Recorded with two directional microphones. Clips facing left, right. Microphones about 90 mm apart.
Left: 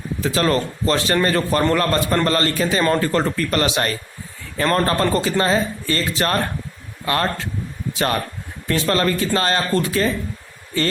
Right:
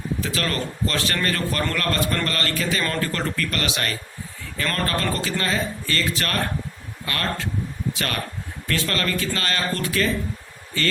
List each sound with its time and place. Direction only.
0.2 s a man's voice: 25° left (ahead or behind)